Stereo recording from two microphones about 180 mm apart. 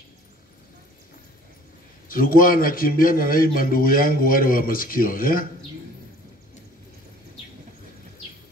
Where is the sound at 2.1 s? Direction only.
50° left (ahead or behind).